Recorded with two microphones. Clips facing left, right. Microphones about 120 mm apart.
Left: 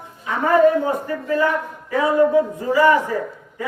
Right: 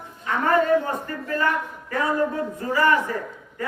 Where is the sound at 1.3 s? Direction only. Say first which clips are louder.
Left 4 dB; 15° left (ahead or behind).